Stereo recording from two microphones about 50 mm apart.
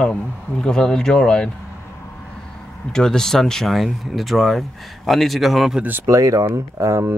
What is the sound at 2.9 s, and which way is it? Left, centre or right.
Speech, centre.